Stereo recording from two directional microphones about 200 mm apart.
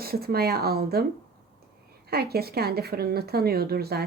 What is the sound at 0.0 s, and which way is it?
Speech, 50° right (ahead or behind).